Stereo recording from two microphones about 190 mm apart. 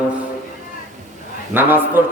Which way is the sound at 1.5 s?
10° right (ahead or behind).